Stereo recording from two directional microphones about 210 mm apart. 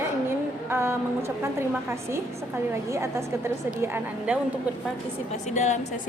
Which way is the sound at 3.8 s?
10° right (ahead or behind).